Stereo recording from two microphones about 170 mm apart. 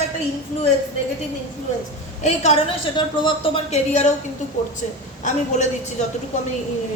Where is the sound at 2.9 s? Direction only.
25° left (ahead or behind).